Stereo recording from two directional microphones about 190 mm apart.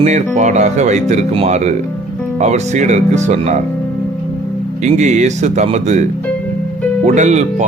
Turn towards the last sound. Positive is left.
turn(degrees=-40)  # may be behind; listen again after turning